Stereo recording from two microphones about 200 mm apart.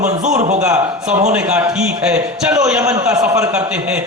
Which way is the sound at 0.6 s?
5° right (ahead or behind).